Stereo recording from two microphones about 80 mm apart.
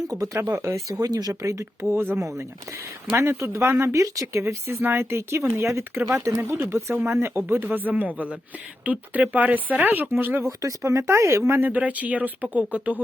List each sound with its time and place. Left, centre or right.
0.1 s speech: right
10.6 s speech: right
11.7 s speech: centre